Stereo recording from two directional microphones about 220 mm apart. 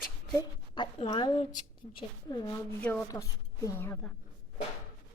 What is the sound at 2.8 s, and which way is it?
A woman's voice, 5° left (ahead or behind).